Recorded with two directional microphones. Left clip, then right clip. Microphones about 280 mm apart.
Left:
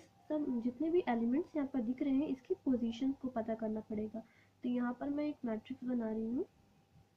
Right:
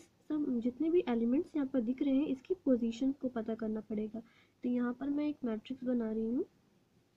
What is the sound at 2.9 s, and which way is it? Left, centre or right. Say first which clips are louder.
Speech: right 2 dB; centre.